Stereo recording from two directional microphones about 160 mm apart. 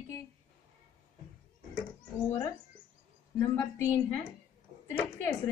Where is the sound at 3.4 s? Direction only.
20° left (ahead or behind).